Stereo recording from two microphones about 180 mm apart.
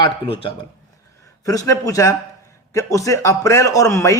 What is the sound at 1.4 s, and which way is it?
A man's voice, 20° left (ahead or behind).